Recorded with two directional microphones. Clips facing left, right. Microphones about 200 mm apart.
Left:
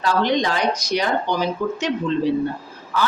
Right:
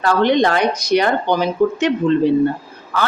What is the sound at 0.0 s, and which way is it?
A woman's voice, 60° right (ahead or behind).